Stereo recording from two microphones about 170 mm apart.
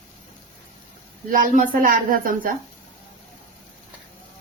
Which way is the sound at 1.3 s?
50° right (ahead or behind).